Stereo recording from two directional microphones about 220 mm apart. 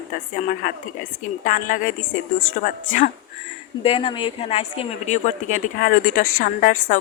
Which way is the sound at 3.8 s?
25° left (ahead or behind).